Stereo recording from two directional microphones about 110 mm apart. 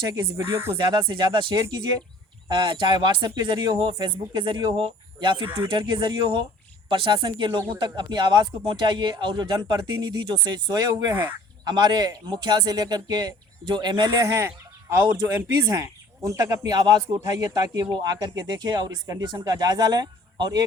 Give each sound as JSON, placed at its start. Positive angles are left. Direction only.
{"t": 0.1, "sound": "speech", "side_deg": -30}
{"t": 0.8, "sound": "speech", "side_deg": -45}
{"t": 1.5, "sound": "speech", "side_deg": -30}
{"t": 2.5, "sound": "speech", "side_deg": -45}
{"t": 14.2, "sound": "speech", "side_deg": -25}